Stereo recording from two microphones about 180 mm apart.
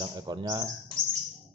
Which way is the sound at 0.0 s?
25° right (ahead or behind).